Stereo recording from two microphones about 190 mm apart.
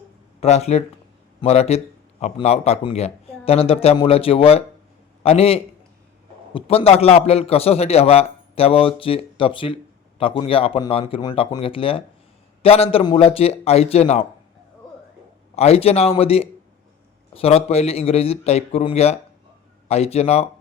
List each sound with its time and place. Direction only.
0.3 s a man's voice: 35° left (ahead or behind)
15.5 s speech: 30° left (ahead or behind)